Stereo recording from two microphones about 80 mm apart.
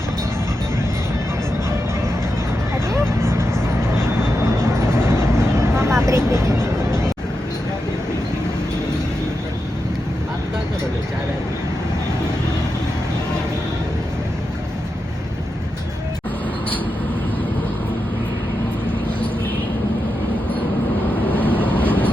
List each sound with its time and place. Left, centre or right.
2.9 s vehicle: right
21.3 s vehicle: left